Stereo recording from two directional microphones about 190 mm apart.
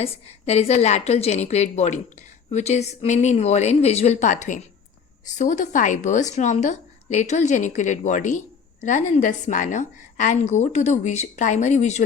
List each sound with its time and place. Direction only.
0.0 s a woman's voice: 35° left (ahead or behind)